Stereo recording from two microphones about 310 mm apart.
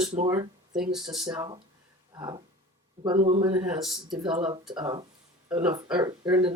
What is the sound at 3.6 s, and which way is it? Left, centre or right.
Speech, centre.